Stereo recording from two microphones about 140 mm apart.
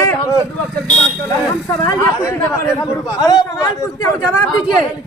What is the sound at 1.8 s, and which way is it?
A man's voice, 20° left (ahead or behind).